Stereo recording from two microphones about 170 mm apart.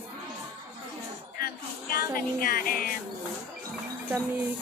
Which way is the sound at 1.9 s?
60° left (ahead or behind).